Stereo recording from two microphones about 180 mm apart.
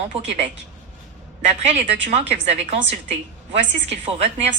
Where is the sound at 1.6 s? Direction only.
40° right (ahead or behind).